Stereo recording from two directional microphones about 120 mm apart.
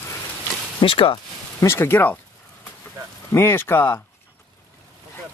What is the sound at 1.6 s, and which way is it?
Speech, 20° left (ahead or behind).